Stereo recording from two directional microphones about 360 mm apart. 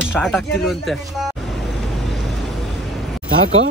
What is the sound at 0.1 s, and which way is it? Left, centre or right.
Speech, centre.